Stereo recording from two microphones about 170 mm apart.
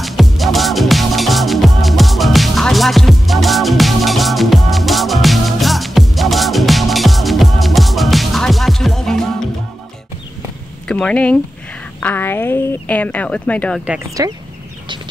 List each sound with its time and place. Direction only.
0.0 s music: centre (ahead or behind)
10.9 s a woman's voice: 5° left (ahead or behind)
14.2 s speech: 20° right (ahead or behind)